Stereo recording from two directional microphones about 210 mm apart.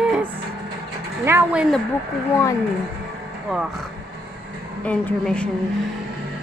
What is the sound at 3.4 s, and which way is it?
Speech, centre (ahead or behind).